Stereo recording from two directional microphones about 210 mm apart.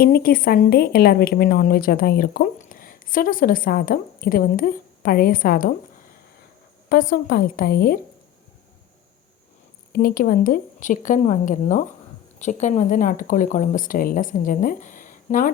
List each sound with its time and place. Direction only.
0.0 s a woman's voice: 45° left (ahead or behind)
6.8 s a woman's voice: 45° left (ahead or behind)
9.9 s speech: 40° left (ahead or behind)